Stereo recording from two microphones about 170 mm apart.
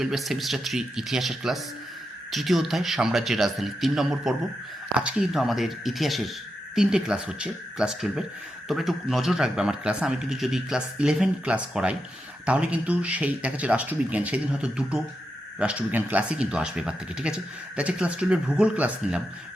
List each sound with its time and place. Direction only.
0.0 s speech: centre (ahead or behind)